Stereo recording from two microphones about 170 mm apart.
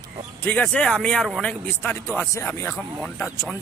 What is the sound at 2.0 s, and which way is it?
Speech, 15° left (ahead or behind).